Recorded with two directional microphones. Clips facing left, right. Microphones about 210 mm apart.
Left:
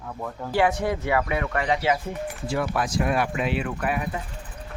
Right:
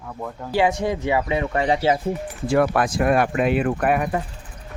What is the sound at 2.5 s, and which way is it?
Speech, 55° right (ahead or behind).